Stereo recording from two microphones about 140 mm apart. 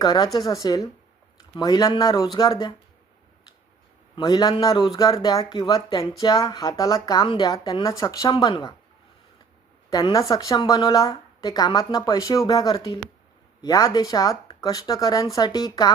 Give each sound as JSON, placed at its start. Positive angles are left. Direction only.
{"t": 0.0, "sound": "speech", "side_deg": 30}
{"t": 4.1, "sound": "a man's voice", "side_deg": 25}
{"t": 9.9, "sound": "speech", "side_deg": 25}